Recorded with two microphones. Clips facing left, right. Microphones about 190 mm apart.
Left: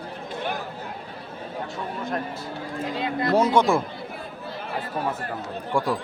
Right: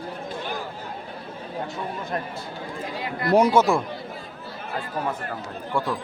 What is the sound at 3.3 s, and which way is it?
Speech, 15° right (ahead or behind).